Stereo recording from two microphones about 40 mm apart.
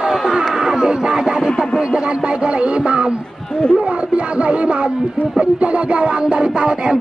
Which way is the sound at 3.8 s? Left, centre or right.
Right.